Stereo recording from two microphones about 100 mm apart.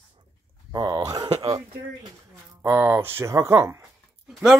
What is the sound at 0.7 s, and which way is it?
Speech, 40° right (ahead or behind).